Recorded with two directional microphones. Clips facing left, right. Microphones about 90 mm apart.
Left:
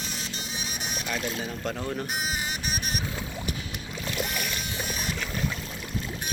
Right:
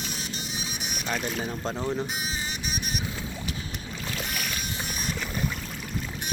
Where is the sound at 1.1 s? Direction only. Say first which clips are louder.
Right 2 dB; 25° right (ahead or behind).